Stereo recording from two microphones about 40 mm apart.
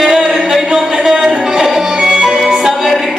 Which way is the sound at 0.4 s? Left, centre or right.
Centre.